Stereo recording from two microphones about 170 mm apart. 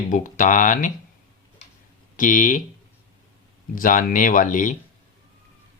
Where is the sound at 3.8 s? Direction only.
50° left (ahead or behind).